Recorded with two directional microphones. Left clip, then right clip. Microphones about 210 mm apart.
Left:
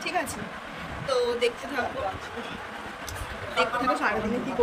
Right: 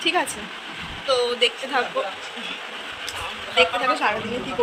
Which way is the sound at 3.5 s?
10° left (ahead or behind).